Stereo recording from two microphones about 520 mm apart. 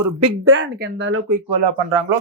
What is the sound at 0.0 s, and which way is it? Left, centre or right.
Speech, right.